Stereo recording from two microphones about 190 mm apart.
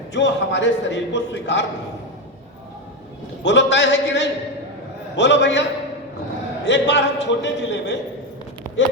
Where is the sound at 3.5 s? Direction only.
65° left (ahead or behind).